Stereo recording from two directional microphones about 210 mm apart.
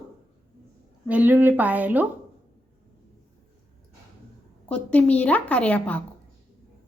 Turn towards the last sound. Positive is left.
turn(degrees=5)  # may be behind; listen again after turning